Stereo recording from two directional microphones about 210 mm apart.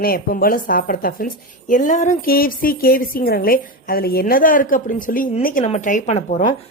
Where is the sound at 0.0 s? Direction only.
45° left (ahead or behind).